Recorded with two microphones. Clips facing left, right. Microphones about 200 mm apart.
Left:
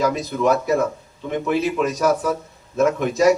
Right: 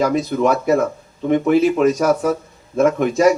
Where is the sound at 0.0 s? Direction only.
55° right (ahead or behind).